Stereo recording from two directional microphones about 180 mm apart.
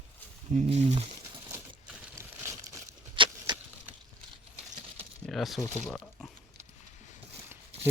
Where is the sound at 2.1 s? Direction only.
15° right (ahead or behind).